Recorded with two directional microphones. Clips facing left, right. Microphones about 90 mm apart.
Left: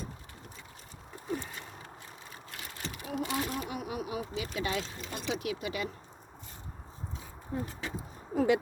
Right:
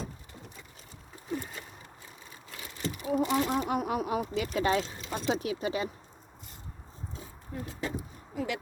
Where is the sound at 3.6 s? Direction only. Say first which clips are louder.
Right 7 dB; 50° right (ahead or behind).